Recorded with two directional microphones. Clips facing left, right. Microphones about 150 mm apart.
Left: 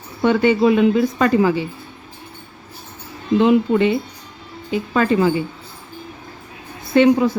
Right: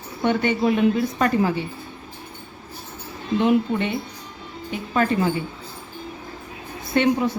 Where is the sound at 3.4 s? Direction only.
90° left.